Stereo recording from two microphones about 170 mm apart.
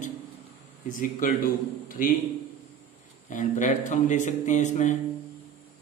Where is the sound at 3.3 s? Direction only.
45° left (ahead or behind).